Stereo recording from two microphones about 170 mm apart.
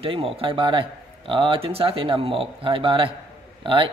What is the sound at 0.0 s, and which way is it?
A man's voice, 30° right (ahead or behind).